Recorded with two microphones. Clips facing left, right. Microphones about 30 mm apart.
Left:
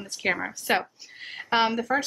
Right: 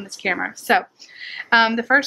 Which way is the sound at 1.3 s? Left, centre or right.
Right.